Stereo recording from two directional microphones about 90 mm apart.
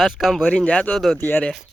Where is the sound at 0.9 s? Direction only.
5° left (ahead or behind).